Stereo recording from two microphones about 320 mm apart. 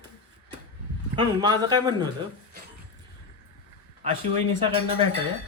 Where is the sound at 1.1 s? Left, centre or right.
Centre.